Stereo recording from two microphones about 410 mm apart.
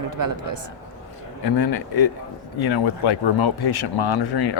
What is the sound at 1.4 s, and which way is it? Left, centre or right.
Speech, left.